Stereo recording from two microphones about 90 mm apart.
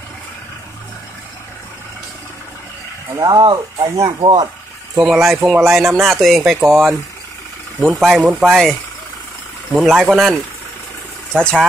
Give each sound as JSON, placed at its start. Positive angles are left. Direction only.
{"t": 3.2, "sound": "speech", "side_deg": -45}
{"t": 4.2, "sound": "speech", "side_deg": -60}
{"t": 4.9, "sound": "speech", "side_deg": -5}
{"t": 9.8, "sound": "speech", "side_deg": 0}